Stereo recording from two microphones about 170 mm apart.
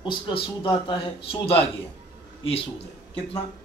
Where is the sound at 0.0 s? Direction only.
30° left (ahead or behind).